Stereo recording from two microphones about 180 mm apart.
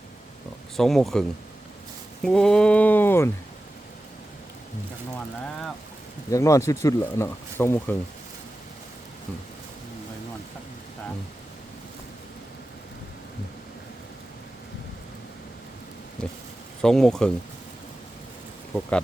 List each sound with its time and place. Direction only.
0.8 s speech: centre (ahead or behind)
2.2 s speech: 5° left (ahead or behind)
6.3 s speech: 15° left (ahead or behind)
16.2 s speech: 5° left (ahead or behind)
18.7 s speech: 5° left (ahead or behind)